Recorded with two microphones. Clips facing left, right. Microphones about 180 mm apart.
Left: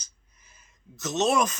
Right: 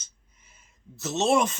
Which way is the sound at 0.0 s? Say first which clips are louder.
Even; 25° right (ahead or behind).